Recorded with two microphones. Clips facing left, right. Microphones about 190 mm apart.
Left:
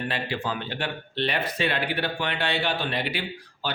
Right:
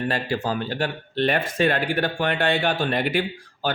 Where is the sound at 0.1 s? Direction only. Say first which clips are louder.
Right 5 dB; 45° right (ahead or behind).